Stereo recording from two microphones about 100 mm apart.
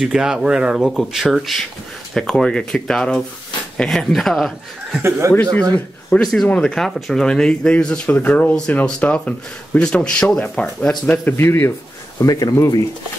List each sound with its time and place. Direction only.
0.0 s speech: 5° right (ahead or behind)
5.3 s speech: 15° left (ahead or behind)
11.3 s speech: 20° left (ahead or behind)
12.2 s speech: 35° left (ahead or behind)